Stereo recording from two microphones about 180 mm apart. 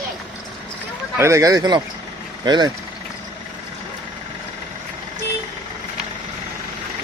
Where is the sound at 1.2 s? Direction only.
15° right (ahead or behind).